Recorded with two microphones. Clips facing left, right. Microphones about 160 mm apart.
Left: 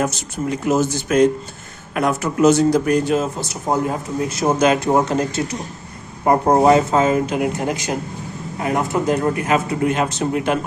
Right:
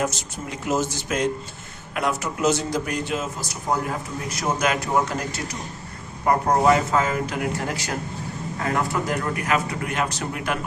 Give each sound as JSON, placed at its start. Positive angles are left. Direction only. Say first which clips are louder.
{"t": 0.7, "sound": "speech", "louder": "left 6 dB", "side_deg": 55}
{"t": 3.4, "sound": "a man's voice", "louder": "left 5 dB", "side_deg": 25}